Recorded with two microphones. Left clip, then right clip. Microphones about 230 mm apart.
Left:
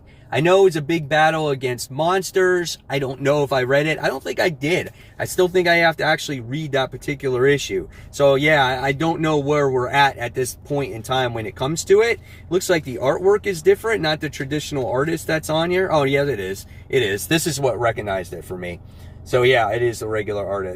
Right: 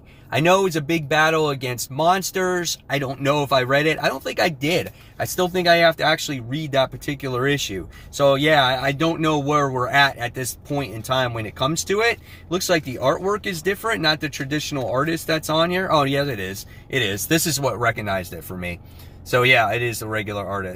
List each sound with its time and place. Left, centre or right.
0.3 s speech: centre
12.5 s speech: centre
19.5 s speech: right